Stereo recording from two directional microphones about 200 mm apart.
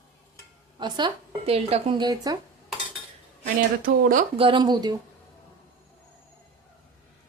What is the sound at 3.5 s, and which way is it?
Speech, 45° right (ahead or behind).